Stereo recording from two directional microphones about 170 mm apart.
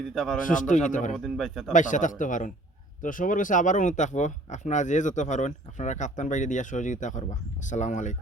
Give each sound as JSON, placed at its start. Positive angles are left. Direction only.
{"t": 0.1, "sound": "a man's voice", "side_deg": 0}
{"t": 0.4, "sound": "speech", "side_deg": 50}
{"t": 1.1, "sound": "a man's voice", "side_deg": 0}
{"t": 1.7, "sound": "speech", "side_deg": 50}